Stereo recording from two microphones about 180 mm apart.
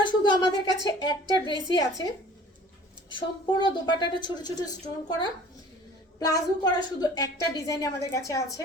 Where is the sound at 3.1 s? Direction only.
25° left (ahead or behind).